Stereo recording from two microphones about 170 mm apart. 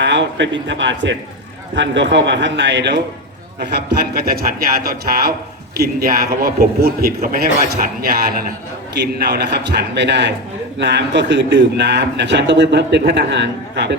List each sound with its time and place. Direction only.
0.0 s a man's voice: 90° right
3.7 s a man's voice: 70° right (ahead or behind)
9.3 s a man's voice: 75° right (ahead or behind); by 13.9 s 90° right